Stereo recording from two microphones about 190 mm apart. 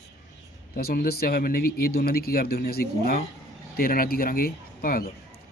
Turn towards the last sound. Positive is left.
turn(degrees=50)  # may be behind; listen again after turning